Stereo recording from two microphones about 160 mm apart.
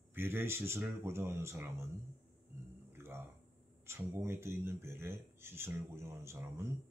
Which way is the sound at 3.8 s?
15° right (ahead or behind).